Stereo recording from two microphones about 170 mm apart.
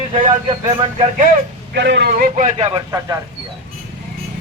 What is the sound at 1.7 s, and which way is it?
A man's voice, 75° right (ahead or behind).